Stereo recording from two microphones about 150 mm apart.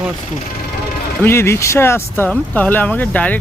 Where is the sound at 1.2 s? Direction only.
15° left (ahead or behind).